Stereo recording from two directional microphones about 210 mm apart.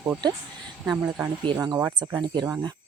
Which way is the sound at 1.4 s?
20° right (ahead or behind).